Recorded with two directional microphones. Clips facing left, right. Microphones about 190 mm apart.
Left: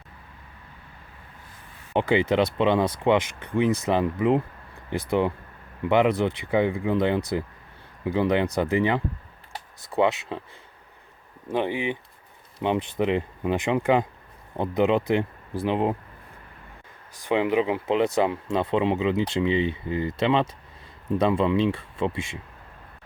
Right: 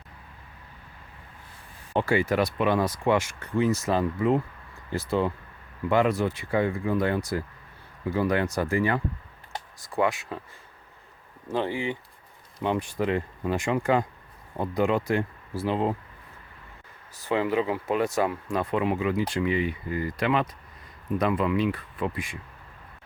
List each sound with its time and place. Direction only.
1.9 s speech: 20° left (ahead or behind)
11.4 s speech: 15° left (ahead or behind)
17.2 s speech: 20° left (ahead or behind)